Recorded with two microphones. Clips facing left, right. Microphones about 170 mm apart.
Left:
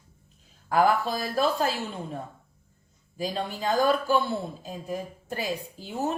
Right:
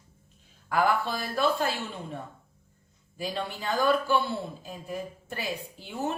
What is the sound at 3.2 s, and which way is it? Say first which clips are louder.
A woman's voice: left 3 dB; 40° left (ahead or behind).